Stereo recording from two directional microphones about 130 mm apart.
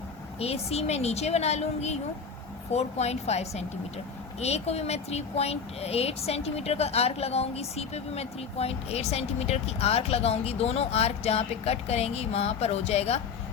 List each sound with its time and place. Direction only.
0.3 s a woman's voice: 50° left (ahead or behind)